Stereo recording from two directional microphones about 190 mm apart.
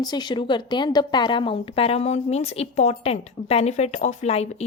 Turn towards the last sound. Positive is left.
turn(degrees=35)  # may be behind; listen again after turning